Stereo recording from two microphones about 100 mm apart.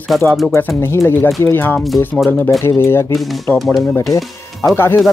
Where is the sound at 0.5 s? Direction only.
25° left (ahead or behind).